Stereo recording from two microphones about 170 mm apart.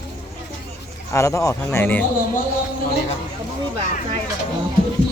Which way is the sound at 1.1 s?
15° left (ahead or behind).